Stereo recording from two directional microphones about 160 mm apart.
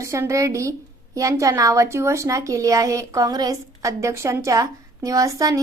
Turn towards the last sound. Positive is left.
turn(degrees=-20)  # may be behind; listen again after turning